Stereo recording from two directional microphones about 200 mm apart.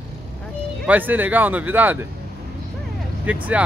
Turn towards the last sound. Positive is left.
turn(degrees=-10)  # may be behind; listen again after turning